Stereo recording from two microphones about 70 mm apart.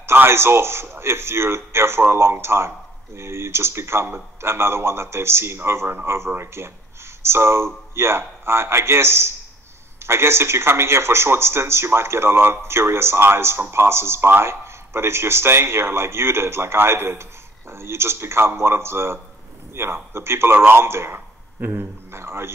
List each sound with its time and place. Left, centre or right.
0.0 s a man's voice: right